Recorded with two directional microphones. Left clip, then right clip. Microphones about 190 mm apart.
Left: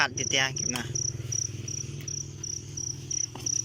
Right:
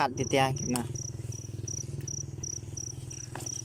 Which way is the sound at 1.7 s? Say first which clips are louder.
Left 3 dB; 35° right (ahead or behind).